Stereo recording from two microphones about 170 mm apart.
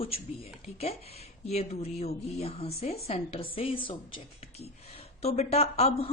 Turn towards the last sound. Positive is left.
turn(degrees=35)  # may be behind; listen again after turning